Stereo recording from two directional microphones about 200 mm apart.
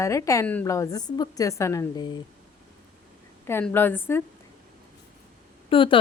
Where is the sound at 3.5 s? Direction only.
10° left (ahead or behind).